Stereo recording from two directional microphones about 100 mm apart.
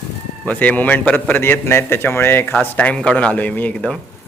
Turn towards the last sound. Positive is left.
turn(degrees=10)  # may be behind; listen again after turning